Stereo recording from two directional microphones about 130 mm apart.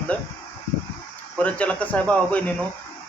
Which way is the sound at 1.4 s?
10° left (ahead or behind).